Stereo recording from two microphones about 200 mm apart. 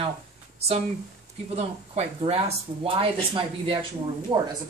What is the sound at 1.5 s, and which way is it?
Speech, 30° right (ahead or behind).